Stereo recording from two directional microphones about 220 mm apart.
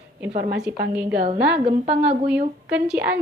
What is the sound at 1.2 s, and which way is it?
Speech, 25° right (ahead or behind).